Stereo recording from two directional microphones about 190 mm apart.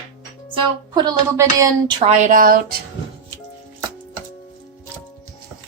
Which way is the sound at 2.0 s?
40° right (ahead or behind).